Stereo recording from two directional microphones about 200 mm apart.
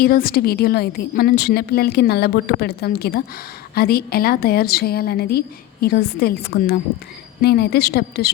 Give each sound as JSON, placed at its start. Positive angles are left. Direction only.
{"t": 0.0, "sound": "a woman's voice", "side_deg": 45}